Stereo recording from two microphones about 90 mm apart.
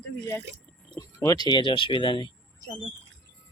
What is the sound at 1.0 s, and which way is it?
Speech, 40° left (ahead or behind).